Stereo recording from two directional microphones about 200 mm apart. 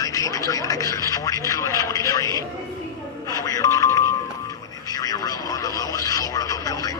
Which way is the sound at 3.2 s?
20° left (ahead or behind).